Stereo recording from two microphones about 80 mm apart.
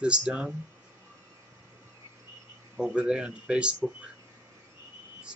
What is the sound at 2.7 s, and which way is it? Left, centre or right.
Speech, centre.